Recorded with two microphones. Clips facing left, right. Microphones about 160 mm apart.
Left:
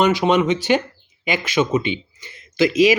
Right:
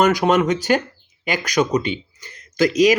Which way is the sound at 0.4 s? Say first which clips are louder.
Even; 40° right (ahead or behind).